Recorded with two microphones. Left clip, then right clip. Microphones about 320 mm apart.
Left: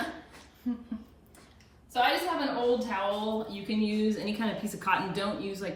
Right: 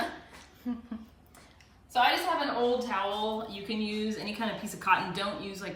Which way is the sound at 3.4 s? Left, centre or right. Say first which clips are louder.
Left 2 dB; centre.